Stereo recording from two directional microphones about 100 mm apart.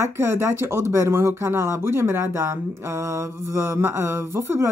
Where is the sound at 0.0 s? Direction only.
25° right (ahead or behind).